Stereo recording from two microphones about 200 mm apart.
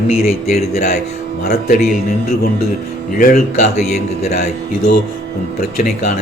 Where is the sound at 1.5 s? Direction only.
50° left (ahead or behind).